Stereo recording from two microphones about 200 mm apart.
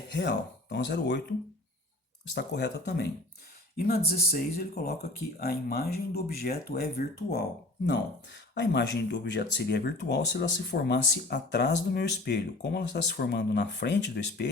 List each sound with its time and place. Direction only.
0.1 s speech: 60° left (ahead or behind)
2.3 s speech: 55° left (ahead or behind)